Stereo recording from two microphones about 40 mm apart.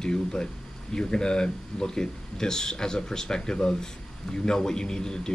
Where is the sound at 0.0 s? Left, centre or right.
Centre.